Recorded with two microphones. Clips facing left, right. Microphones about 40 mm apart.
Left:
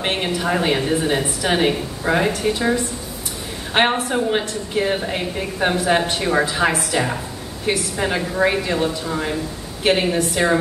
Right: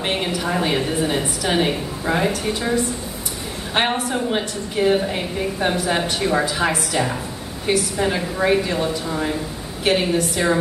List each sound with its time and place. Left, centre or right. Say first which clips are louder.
0.0 s a woman's voice: left 1 dB; centre